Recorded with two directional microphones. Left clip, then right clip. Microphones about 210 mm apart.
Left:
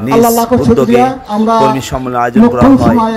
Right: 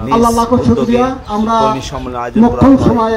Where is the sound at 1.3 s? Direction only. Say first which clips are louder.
Left 3 dB; 50° left (ahead or behind).